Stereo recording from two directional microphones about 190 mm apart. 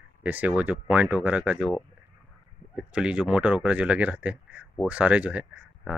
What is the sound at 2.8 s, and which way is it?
Speech, 5° right (ahead or behind).